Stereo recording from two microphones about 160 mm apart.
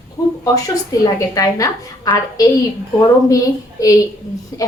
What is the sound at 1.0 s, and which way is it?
Speech, 20° left (ahead or behind).